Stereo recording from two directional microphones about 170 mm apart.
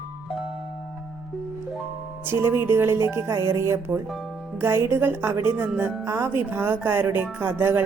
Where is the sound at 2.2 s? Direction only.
15° right (ahead or behind).